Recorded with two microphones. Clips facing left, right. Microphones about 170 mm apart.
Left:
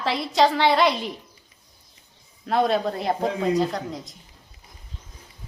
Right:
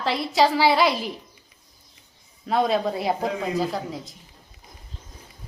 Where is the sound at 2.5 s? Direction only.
Centre (ahead or behind).